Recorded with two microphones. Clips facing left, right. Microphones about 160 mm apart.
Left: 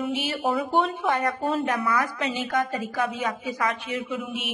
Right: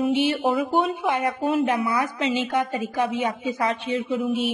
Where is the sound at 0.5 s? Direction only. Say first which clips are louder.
Right 2 dB; 10° right (ahead or behind).